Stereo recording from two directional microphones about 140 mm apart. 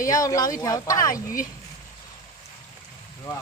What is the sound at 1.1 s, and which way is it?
Speech, 80° left.